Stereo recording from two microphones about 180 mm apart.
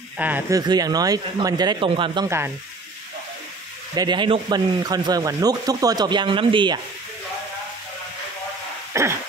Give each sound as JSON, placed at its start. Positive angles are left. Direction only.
{"t": 0.2, "sound": "speech", "side_deg": -10}
{"t": 0.6, "sound": "speech", "side_deg": -20}
{"t": 2.2, "sound": "speech", "side_deg": -15}
{"t": 3.9, "sound": "speech", "side_deg": -25}
{"t": 9.0, "sound": "throat clearing", "side_deg": -15}